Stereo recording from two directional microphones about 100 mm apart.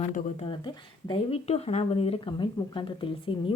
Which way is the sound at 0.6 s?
50° left (ahead or behind).